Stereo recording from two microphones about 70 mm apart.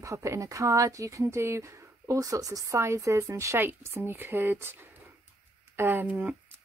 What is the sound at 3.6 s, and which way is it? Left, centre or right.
Speech, right.